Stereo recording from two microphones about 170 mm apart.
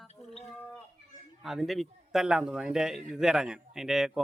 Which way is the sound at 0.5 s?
10° left (ahead or behind).